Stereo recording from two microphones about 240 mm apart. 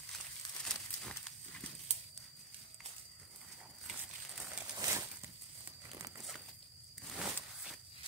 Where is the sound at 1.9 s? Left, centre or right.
Right.